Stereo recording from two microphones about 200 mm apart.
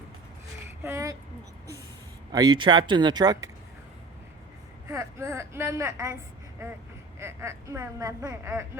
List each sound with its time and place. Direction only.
0.8 s a sound: 15° right (ahead or behind)
2.3 s speech: 20° right (ahead or behind)
4.9 s a woman's voice: 15° right (ahead or behind)
7.2 s a woman's voice: 15° right (ahead or behind)